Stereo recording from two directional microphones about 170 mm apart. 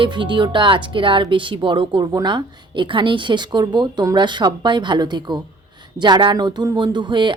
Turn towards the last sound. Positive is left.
turn(degrees=-25)  # may be behind; listen again after turning